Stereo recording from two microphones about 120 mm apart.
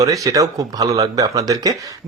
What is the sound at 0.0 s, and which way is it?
Speech, 30° right (ahead or behind).